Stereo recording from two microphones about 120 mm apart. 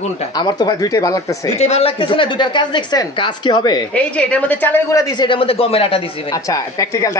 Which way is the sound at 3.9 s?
10° left (ahead or behind).